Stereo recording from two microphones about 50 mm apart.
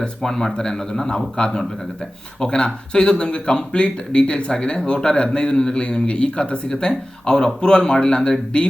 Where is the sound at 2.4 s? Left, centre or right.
Centre.